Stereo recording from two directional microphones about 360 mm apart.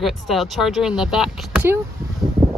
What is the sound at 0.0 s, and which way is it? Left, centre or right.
Speech, centre.